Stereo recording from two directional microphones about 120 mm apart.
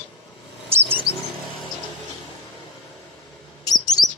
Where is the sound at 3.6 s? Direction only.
35° left (ahead or behind).